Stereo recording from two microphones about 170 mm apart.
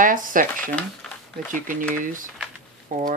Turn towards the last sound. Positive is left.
turn(degrees=-50)  # may be behind; listen again after turning